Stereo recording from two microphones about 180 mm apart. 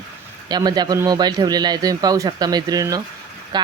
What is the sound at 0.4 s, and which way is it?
Speech, 20° right (ahead or behind).